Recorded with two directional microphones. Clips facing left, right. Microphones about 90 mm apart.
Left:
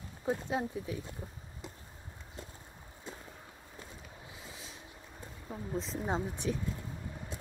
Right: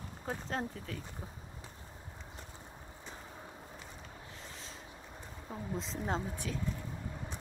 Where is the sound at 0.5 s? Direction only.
10° left (ahead or behind).